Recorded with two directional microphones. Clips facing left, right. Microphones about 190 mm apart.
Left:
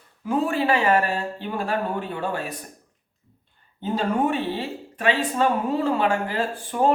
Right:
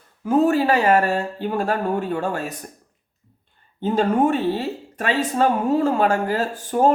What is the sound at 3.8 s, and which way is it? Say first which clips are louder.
Speech: right 5 dB; 45° right (ahead or behind).